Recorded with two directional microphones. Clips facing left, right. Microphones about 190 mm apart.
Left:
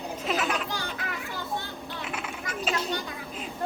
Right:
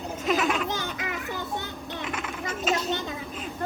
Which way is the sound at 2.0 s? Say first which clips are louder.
Right 3 dB; 5° left (ahead or behind).